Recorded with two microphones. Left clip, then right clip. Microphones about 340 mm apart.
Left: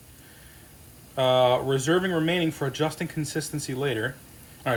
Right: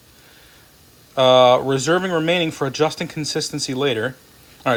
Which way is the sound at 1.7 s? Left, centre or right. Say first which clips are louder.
Right 5 dB; centre.